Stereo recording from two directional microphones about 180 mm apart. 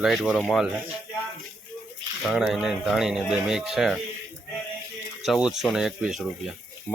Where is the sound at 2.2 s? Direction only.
Centre (ahead or behind).